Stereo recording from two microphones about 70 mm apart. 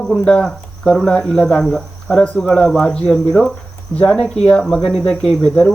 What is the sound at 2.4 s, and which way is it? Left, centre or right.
Speech, centre.